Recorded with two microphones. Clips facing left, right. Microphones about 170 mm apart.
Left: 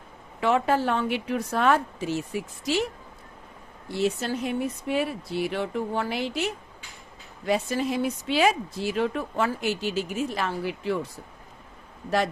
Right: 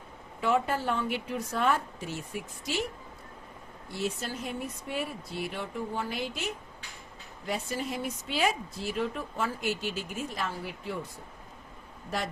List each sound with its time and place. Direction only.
0.3 s speech: 90° left
3.9 s speech: 80° left
9.9 s speech: 90° left